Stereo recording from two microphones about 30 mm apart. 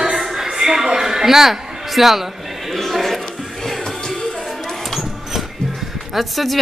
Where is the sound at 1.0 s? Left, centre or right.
Centre.